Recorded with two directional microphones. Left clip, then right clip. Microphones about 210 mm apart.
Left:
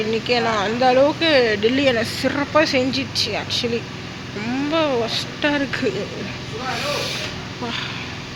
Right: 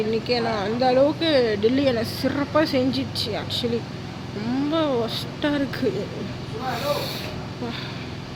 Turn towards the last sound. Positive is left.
turn(degrees=-5)  # may be behind; listen again after turning